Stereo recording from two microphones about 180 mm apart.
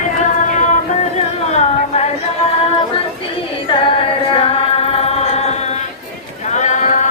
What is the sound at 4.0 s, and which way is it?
Chant, 30° left (ahead or behind).